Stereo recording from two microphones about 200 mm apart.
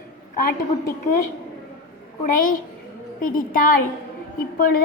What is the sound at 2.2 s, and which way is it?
A woman's voice, 45° left (ahead or behind).